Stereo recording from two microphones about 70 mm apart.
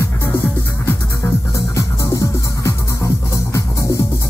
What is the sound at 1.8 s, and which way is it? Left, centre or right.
Music, left.